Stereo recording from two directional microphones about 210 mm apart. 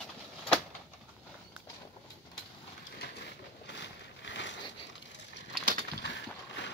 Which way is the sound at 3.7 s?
55° left (ahead or behind).